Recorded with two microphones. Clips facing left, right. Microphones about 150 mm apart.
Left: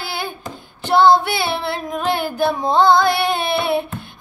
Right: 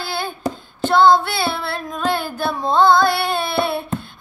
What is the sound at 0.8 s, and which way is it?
Child singing, 15° left (ahead or behind).